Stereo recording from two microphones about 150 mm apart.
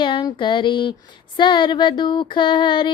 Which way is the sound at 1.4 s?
30° left (ahead or behind).